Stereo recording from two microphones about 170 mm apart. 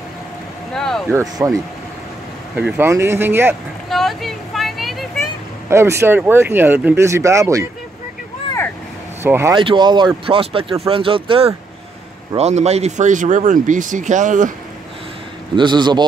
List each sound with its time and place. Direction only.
0.7 s a sound: 5° left (ahead or behind)
1.4 s speech: 15° right (ahead or behind)
3.9 s a sound: centre (ahead or behind)
5.7 s speech: 15° right (ahead or behind)
9.2 s speech: 15° right (ahead or behind)
9.6 s speech: 30° right (ahead or behind); by 14.5 s 50° right (ahead or behind)
15.5 s a man's voice: 25° right (ahead or behind)